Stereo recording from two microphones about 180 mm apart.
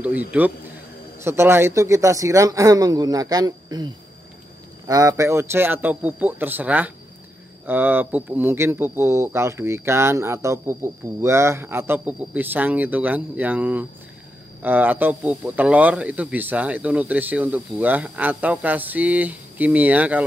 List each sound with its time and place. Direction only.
0.3 s speech: 10° right (ahead or behind)